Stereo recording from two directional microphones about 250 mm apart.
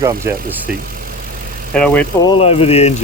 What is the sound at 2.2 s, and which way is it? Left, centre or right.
Speech, left.